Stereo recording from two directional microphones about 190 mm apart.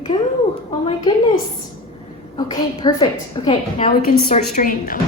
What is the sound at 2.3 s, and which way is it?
A woman's voice, 25° left (ahead or behind).